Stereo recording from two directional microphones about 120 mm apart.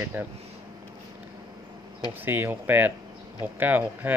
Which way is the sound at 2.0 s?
15° right (ahead or behind).